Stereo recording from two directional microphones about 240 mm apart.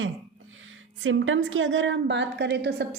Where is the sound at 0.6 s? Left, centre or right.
Right.